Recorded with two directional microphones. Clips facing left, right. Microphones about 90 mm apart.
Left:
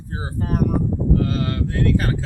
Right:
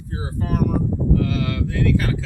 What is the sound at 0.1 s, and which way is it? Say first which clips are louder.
Speech: even; 35° left (ahead or behind).